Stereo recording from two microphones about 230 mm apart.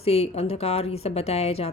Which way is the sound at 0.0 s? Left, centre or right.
Left.